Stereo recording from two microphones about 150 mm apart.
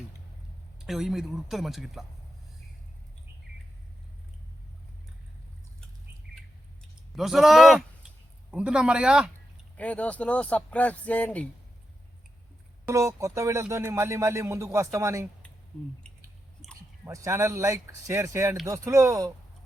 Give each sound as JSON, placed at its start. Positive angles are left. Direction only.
{"t": 0.9, "sound": "speech", "side_deg": 0}
{"t": 7.2, "sound": "speech", "side_deg": 0}
{"t": 9.7, "sound": "speech", "side_deg": 10}
{"t": 12.9, "sound": "speech", "side_deg": -20}
{"t": 17.1, "sound": "speech", "side_deg": -20}